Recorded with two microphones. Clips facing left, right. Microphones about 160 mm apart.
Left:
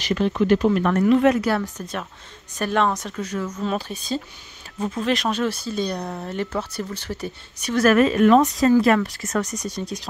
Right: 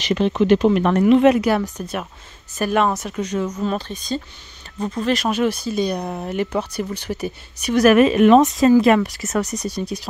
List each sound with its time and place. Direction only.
0.0 s speech: 20° right (ahead or behind)
3.2 s speech: 20° right (ahead or behind)
3.6 s speech: 10° left (ahead or behind)
5.4 s speech: 15° right (ahead or behind)